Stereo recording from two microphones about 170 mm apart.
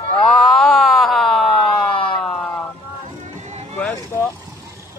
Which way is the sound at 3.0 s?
45° right (ahead or behind).